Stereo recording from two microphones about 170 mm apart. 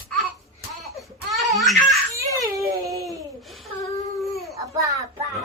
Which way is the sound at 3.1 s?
Centre (ahead or behind).